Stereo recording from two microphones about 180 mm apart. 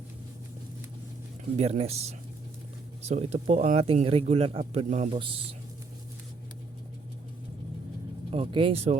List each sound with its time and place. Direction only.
1.5 s speech: 35° right (ahead or behind)
8.3 s speech: 30° right (ahead or behind)